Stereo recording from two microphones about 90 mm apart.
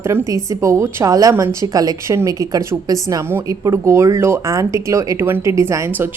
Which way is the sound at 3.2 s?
25° right (ahead or behind).